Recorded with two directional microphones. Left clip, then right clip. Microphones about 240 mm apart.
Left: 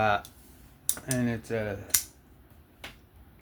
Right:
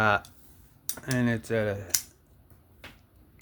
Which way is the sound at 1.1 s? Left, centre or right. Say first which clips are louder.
Right 3 dB; right.